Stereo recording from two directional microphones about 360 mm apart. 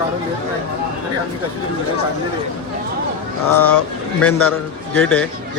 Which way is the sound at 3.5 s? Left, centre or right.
Centre.